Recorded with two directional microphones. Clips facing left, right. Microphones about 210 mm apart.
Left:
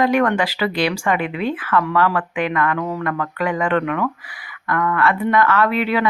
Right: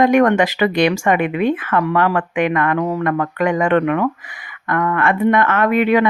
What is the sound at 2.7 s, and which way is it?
Speech, 35° right (ahead or behind).